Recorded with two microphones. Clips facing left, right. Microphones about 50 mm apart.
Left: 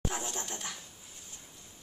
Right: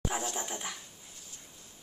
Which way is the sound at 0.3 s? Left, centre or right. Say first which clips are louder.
Right 2 dB; centre.